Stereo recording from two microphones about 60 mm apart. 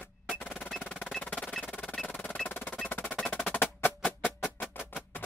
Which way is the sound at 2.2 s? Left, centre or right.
Left.